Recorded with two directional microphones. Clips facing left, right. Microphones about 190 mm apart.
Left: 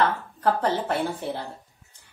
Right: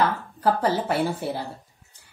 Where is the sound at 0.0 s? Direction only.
5° right (ahead or behind).